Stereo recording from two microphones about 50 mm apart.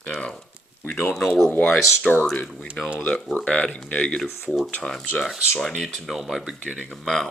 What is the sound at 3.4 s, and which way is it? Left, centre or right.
Speech, left.